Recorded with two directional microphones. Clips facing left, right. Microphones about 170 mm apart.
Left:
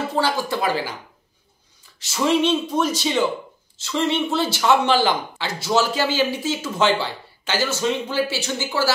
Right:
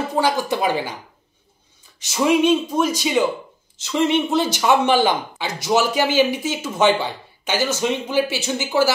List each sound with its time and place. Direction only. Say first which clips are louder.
0.1 s speech: right 4 dB; 15° right (ahead or behind)
2.0 s speech: right 2 dB; 15° right (ahead or behind)